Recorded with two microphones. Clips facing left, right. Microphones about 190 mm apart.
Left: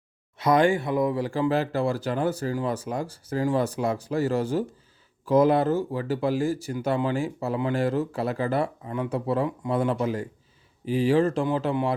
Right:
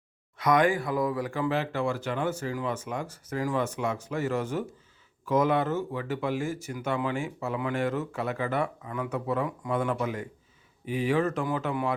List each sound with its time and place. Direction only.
0.3 s speech: 30° left (ahead or behind)